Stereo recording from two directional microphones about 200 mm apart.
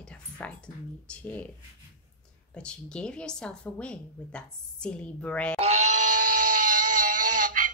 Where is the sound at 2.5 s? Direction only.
5° left (ahead or behind).